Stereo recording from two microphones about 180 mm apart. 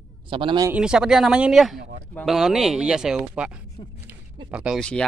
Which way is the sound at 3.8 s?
30° left (ahead or behind).